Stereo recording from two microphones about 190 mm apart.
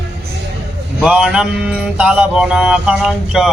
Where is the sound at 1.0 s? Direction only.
5° right (ahead or behind).